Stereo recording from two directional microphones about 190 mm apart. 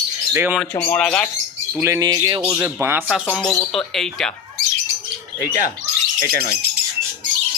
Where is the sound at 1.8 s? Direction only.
20° right (ahead or behind).